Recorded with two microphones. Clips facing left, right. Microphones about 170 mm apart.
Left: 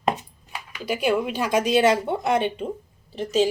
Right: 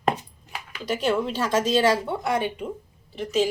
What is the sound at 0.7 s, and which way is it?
A woman's voice, 10° left (ahead or behind).